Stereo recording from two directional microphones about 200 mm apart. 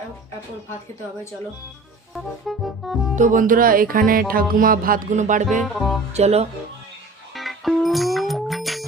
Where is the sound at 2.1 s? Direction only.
Centre (ahead or behind).